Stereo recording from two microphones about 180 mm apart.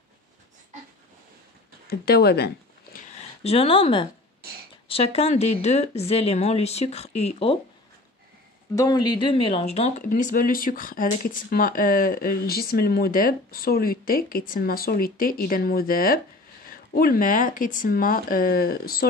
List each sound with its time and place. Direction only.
1.9 s speech: 60° left (ahead or behind)
3.4 s speech: 30° left (ahead or behind)
8.7 s speech: 20° left (ahead or behind); by 19.0 s 55° left (ahead or behind)